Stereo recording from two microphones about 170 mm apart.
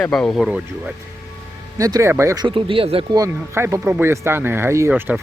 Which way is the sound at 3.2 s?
15° right (ahead or behind).